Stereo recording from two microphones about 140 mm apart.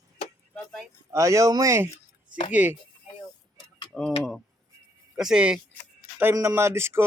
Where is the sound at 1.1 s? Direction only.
20° right (ahead or behind).